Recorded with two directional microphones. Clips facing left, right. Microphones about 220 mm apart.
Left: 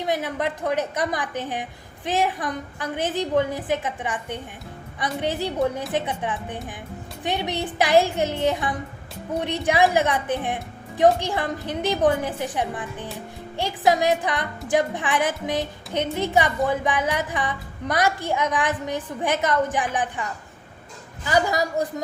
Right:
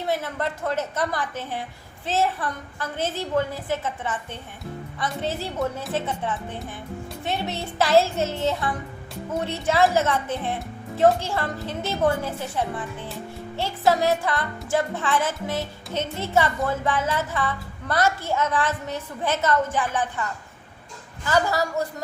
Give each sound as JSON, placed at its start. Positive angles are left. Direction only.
{"t": 0.0, "sound": "speech", "side_deg": 15}
{"t": 21.2, "sound": "speech", "side_deg": 15}